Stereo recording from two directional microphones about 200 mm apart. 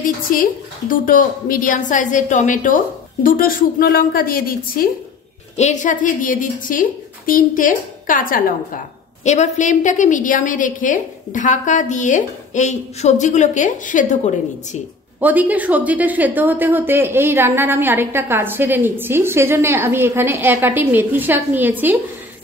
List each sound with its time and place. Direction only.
0.0 s a woman's voice: 45° left (ahead or behind)
15.1 s a woman's voice: 10° right (ahead or behind)